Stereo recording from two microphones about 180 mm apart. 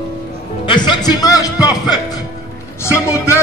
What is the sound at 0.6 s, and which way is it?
A man's voice, 25° left (ahead or behind).